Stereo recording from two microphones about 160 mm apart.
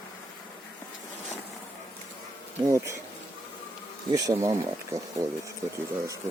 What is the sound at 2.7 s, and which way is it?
Speech, 20° right (ahead or behind).